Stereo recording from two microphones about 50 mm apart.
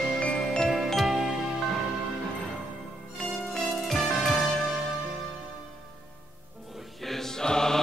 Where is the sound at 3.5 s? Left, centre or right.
Centre.